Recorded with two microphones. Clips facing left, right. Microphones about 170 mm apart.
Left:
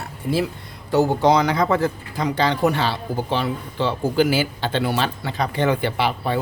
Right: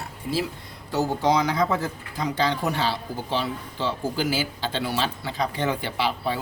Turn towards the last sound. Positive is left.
turn(degrees=60)  # may be behind; listen again after turning